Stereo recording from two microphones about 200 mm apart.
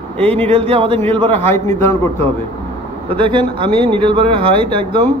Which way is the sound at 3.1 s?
25° right (ahead or behind).